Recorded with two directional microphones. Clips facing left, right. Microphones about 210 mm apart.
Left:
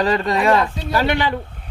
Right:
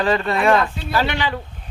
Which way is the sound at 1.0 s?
50° left (ahead or behind).